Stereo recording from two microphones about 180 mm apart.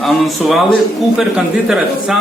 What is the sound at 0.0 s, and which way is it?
Speech, centre (ahead or behind).